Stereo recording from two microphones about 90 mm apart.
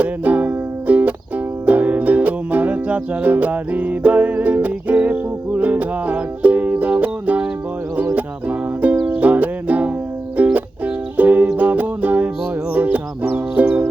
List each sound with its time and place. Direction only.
0.0 s music: 20° right (ahead or behind)